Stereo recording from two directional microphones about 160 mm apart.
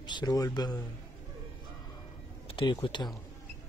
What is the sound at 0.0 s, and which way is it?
Speech, 25° left (ahead or behind).